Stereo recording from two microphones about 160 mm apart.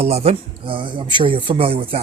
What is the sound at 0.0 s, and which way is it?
Speech, 40° right (ahead or behind).